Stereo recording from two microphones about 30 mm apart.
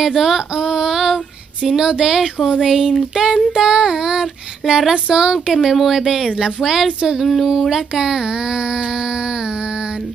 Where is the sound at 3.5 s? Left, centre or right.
Right.